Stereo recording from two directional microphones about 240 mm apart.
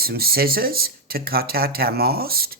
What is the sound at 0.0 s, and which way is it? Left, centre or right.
Speech, right.